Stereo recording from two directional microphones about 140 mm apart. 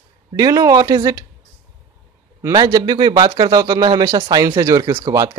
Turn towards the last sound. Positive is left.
turn(degrees=-25)  # may be behind; listen again after turning